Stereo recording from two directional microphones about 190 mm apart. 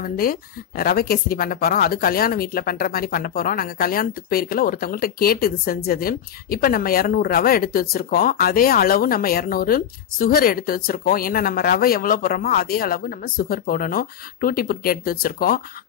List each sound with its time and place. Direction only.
0.0 s speech: 50° left (ahead or behind)